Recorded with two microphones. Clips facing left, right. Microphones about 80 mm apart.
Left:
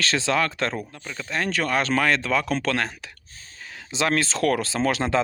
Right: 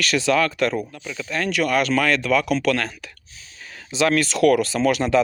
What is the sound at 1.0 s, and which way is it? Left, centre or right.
Speech, left.